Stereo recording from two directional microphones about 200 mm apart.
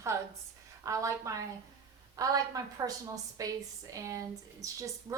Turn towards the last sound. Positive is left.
turn(degrees=-15)  # may be behind; listen again after turning